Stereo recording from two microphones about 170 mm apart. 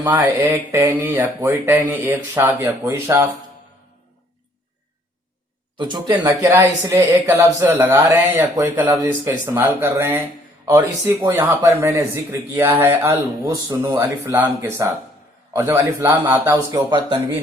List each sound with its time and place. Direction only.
0.0 s speech: 10° right (ahead or behind)
5.7 s speech: 30° right (ahead or behind)